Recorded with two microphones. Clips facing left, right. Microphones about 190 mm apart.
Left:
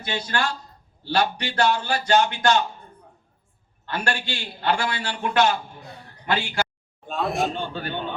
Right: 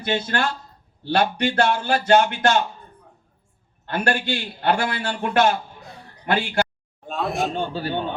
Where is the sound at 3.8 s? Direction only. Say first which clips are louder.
Right 5 dB; 50° right (ahead or behind).